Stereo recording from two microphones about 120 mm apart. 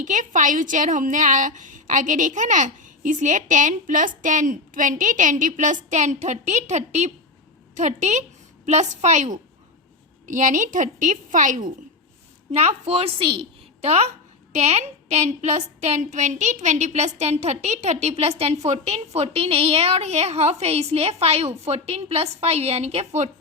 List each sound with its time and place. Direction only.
0.0 s a woman's voice: 90° right
10.2 s a woman's voice: 90° right
12.5 s a woman's voice: 60° right (ahead or behind)
13.8 s a woman's voice: 60° right (ahead or behind)
18.2 s a woman's voice: 55° right (ahead or behind)